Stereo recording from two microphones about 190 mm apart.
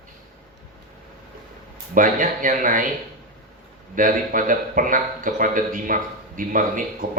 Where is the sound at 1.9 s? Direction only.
45° right (ahead or behind).